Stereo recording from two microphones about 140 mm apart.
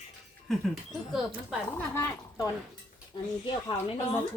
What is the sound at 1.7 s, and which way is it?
Speech, 15° left (ahead or behind).